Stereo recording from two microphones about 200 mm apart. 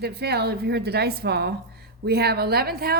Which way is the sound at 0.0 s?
55° right (ahead or behind).